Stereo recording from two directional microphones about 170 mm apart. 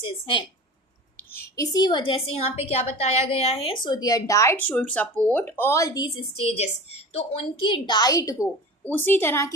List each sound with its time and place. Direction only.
0.0 s a woman's voice: 30° left (ahead or behind)
1.1 s a woman's voice: 15° left (ahead or behind)